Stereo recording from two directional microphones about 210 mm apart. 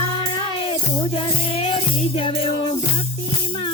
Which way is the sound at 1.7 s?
25° left (ahead or behind).